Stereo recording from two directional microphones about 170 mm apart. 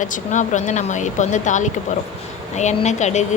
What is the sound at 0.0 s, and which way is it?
Speech, 45° left (ahead or behind).